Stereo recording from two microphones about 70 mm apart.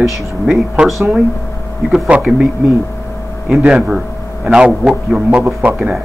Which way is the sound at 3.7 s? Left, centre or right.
Centre.